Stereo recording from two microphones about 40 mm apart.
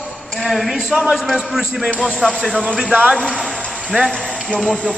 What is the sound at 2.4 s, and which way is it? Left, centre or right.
Speech, centre.